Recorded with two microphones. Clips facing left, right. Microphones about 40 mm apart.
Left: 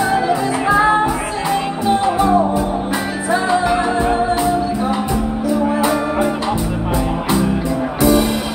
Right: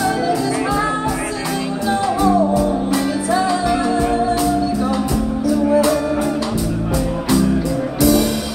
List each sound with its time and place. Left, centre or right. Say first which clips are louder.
0.0 s music: left 2 dB; left